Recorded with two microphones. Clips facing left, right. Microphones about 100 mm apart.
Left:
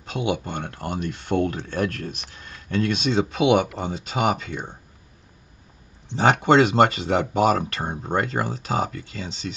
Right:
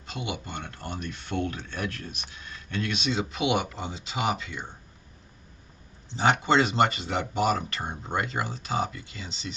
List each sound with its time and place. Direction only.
0.0 s speech: 50° left (ahead or behind)
6.0 s speech: 45° left (ahead or behind)